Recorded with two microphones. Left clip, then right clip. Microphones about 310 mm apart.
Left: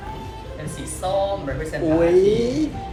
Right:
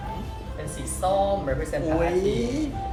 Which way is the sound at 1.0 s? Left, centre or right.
Right.